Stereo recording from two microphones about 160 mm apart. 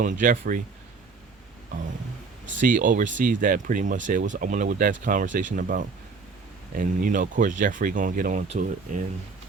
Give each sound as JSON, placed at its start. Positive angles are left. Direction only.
{"t": 0.0, "sound": "speech", "side_deg": -55}
{"t": 2.6, "sound": "speech", "side_deg": -55}